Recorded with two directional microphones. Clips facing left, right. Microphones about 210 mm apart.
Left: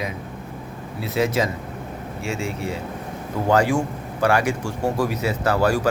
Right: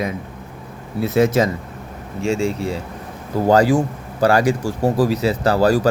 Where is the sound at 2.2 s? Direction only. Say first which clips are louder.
Right 8 dB; 35° right (ahead or behind).